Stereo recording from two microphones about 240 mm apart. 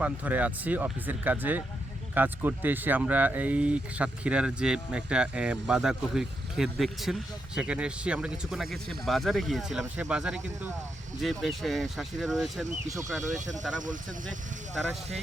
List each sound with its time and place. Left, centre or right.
0.0 s speech: centre
13.4 s speech: right
14.8 s speech: centre